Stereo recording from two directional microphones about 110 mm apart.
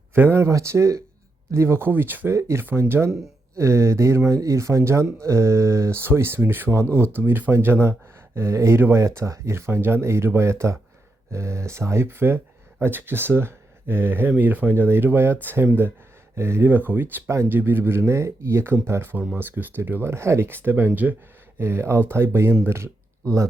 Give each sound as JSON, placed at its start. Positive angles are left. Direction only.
{"t": 0.1, "sound": "speech", "side_deg": -20}